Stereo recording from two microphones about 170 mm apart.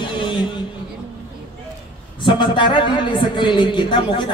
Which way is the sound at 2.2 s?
30° left (ahead or behind).